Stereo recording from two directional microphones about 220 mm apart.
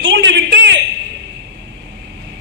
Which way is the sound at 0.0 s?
55° right (ahead or behind).